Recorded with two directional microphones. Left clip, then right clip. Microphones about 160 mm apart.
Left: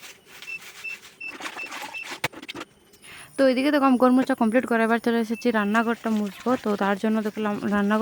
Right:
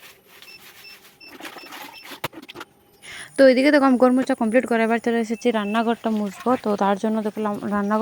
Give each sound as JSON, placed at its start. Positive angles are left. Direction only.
{"t": 3.3, "sound": "speech", "side_deg": -15}
{"t": 4.2, "sound": "speech", "side_deg": 0}